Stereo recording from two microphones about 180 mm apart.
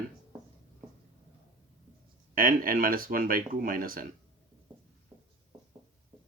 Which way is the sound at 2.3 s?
50° right (ahead or behind).